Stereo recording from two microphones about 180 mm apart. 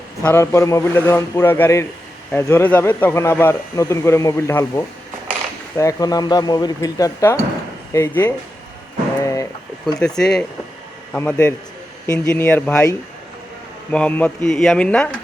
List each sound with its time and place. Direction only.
0.2 s speech: 15° left (ahead or behind)
9.2 s a sound: 15° left (ahead or behind)
10.0 s speech: 5° left (ahead or behind)
13.9 s speech: 5° left (ahead or behind)